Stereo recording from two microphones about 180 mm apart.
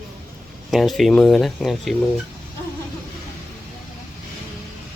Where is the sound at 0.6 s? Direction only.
Centre (ahead or behind).